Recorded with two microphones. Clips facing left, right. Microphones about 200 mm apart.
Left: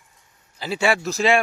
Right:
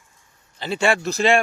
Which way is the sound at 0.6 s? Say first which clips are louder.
Right 1 dB; 5° left (ahead or behind).